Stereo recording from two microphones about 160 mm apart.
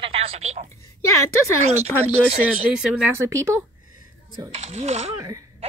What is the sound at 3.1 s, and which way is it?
Speech, 20° right (ahead or behind).